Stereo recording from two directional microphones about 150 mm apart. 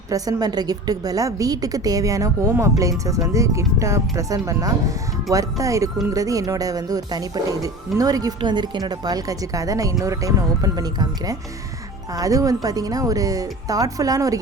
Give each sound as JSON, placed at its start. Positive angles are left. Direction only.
{"t": 0.1, "sound": "speech", "side_deg": -25}